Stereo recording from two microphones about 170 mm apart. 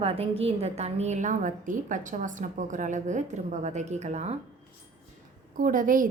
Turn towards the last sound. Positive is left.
turn(degrees=-55)  # may be behind; listen again after turning